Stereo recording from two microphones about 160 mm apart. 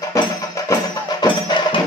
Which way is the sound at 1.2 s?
30° left (ahead or behind).